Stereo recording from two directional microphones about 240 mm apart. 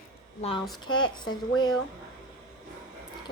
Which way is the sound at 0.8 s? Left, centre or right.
Centre.